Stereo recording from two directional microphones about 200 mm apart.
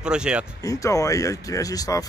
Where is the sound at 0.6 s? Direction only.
15° left (ahead or behind).